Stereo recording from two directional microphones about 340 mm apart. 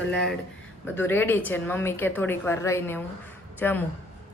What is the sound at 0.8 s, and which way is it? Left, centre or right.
A woman's voice, centre.